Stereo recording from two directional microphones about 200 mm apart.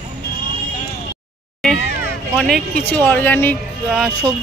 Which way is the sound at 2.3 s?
5° left (ahead or behind).